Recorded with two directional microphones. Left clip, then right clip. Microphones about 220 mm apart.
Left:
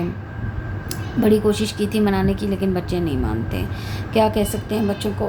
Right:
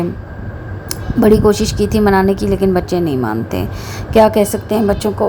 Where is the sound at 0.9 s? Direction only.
25° right (ahead or behind).